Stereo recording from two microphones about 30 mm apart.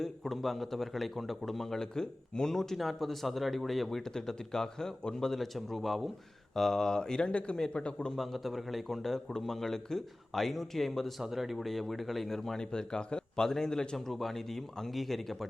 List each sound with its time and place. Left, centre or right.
0.0 s a man's voice: centre
1.8 s a man's voice: left; by 4.0 s centre
4.1 s speech: centre
5.5 s a man's voice: centre
6.5 s speech: centre; by 8.1 s left
8.1 s a man's voice: centre
11.2 s a man's voice: centre
12.5 s speech: left
14.1 s a man's voice: centre